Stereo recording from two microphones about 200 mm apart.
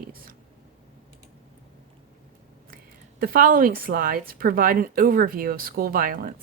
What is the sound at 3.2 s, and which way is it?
Speech, 45° right (ahead or behind).